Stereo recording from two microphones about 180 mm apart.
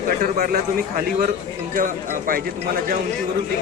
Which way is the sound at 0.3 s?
55° right (ahead or behind).